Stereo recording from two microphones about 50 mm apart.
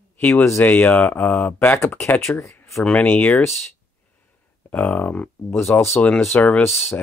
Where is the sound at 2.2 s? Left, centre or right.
Left.